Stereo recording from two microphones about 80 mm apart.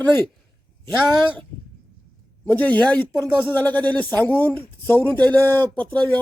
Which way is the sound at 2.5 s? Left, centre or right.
Centre.